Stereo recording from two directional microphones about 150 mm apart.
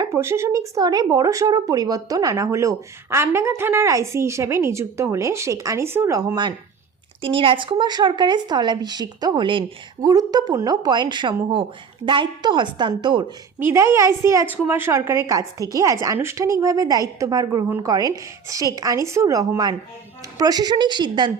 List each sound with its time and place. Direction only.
0.0 s a woman's voice: 15° right (ahead or behind)
13.6 s speech: 15° right (ahead or behind)